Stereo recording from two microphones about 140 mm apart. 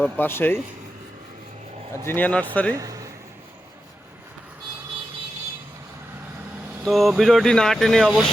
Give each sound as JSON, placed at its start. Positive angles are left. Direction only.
{"t": 0.2, "sound": "speech", "side_deg": 15}
{"t": 2.0, "sound": "speech", "side_deg": 15}
{"t": 2.7, "sound": "speech", "side_deg": -25}
{"t": 6.8, "sound": "speech", "side_deg": 0}